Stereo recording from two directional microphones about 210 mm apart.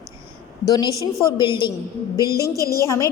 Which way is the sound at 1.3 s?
20° left (ahead or behind).